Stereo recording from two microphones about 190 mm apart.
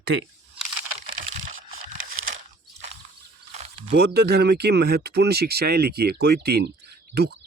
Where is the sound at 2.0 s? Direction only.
90° right.